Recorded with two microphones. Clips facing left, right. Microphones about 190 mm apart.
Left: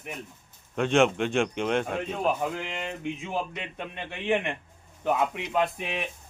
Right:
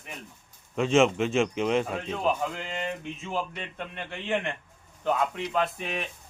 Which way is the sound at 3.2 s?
15° left (ahead or behind).